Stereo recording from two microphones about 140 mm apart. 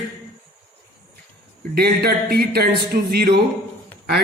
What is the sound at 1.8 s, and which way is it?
Speech, 90° right.